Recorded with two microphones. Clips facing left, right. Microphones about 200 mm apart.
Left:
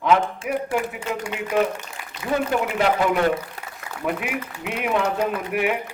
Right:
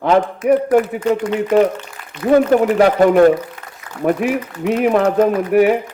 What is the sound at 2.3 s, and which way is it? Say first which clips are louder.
A man's voice: right 11 dB; 40° right (ahead or behind).